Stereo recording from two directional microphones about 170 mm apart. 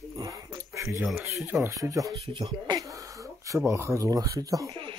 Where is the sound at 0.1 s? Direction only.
20° right (ahead or behind).